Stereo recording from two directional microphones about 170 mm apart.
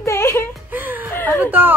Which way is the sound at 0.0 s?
15° left (ahead or behind).